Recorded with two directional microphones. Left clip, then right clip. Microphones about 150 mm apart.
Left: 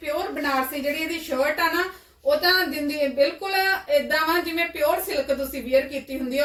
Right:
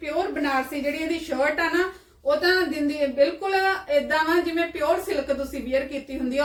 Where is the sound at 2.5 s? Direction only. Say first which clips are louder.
Left 1 dB; centre (ahead or behind).